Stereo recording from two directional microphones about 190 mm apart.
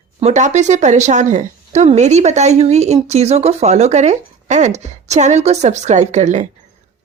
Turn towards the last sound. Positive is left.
turn(degrees=-40)  # may be behind; listen again after turning